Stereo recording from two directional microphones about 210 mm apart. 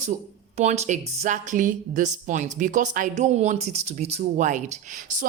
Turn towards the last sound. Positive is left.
turn(degrees=-35)  # may be behind; listen again after turning